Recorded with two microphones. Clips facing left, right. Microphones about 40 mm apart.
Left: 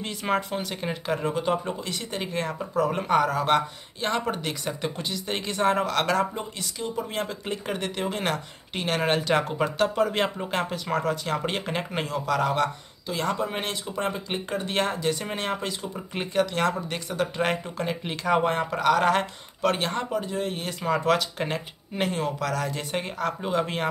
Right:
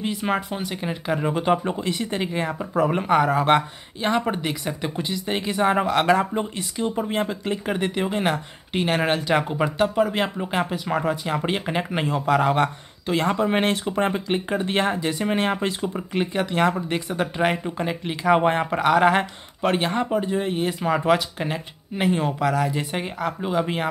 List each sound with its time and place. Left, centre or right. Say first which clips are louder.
0.0 s speech: right 2 dB; centre
1.3 s speech: right 4 dB; right
7.4 s speech: right 5 dB; centre; by 14.2 s right
14.3 s speech: right 5 dB; right
16.1 s speech: left 1 dB; centre
22.1 s speech: right 5 dB; right